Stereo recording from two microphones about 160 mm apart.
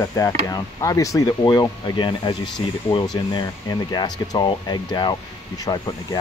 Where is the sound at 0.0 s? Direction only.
20° left (ahead or behind).